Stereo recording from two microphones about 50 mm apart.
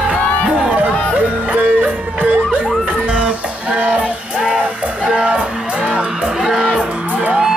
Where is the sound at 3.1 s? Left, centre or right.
Right.